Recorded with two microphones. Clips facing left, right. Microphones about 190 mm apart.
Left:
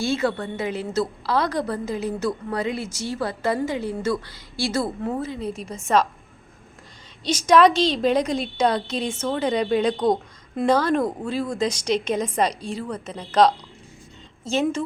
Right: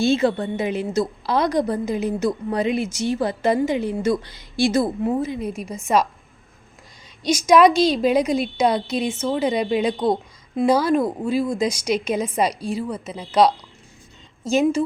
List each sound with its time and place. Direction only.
0.0 s a woman's voice: 20° right (ahead or behind)
7.3 s a woman's voice: 10° right (ahead or behind)